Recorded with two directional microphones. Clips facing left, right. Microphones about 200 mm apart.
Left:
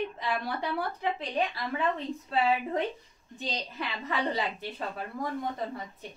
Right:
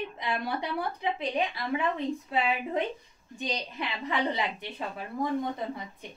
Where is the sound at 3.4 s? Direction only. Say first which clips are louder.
Right 2 dB; 15° right (ahead or behind).